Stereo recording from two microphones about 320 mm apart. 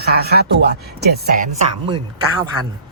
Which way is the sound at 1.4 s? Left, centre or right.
Centre.